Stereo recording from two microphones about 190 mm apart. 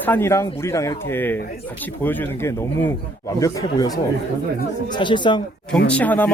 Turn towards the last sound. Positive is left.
turn(degrees=10)  # may be behind; listen again after turning